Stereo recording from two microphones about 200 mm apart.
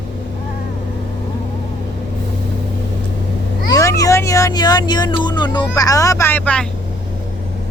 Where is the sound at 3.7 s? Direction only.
15° left (ahead or behind).